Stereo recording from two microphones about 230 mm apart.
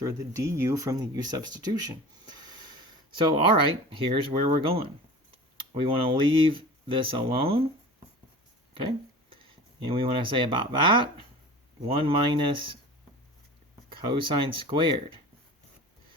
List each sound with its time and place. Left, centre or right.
0.0 s speech: centre
2.2 s a sound: centre
3.2 s speech: right
8.7 s speech: right
13.9 s speech: right